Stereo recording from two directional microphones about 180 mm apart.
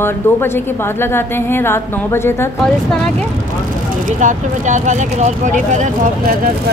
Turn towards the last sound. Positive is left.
turn(degrees=-50)  # may be behind; listen again after turning